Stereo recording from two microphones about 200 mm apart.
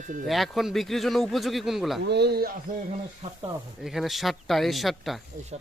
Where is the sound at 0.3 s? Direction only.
Centre (ahead or behind).